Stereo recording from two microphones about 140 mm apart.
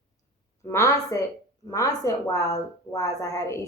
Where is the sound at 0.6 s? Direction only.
20° left (ahead or behind).